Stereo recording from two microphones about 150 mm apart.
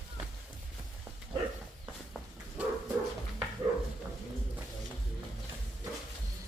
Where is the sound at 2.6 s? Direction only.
10° right (ahead or behind).